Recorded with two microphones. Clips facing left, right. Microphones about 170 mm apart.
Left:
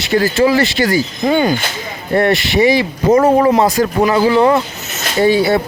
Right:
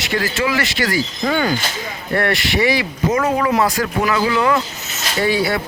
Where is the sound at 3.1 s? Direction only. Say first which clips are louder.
Left 7 dB; 30° left (ahead or behind).